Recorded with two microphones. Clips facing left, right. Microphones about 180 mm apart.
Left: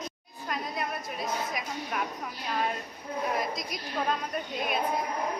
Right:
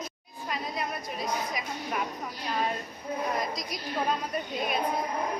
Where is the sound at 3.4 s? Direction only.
Centre (ahead or behind).